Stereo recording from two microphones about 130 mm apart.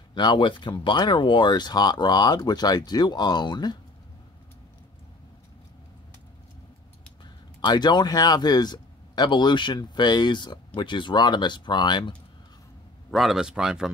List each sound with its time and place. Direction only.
0.1 s speech: 35° left (ahead or behind)
7.6 s speech: 35° left (ahead or behind)
13.1 s a man's voice: centre (ahead or behind)